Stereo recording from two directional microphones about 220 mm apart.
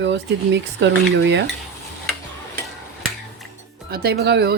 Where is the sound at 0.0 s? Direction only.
55° right (ahead or behind).